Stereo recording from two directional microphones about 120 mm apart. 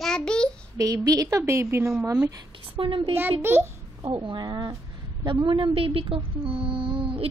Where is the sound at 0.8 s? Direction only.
30° right (ahead or behind).